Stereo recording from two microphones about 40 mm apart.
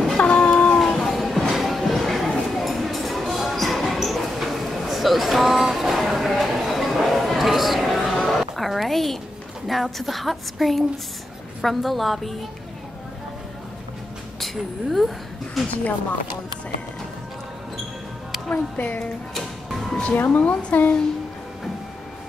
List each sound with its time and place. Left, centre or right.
0.2 s cat: left
0.7 s music: centre
2.5 s a sound: centre
9.7 s a woman's voice: centre
14.4 s a woman's voice: centre
18.5 s speech: left
19.3 s music: centre
20.2 s speech: left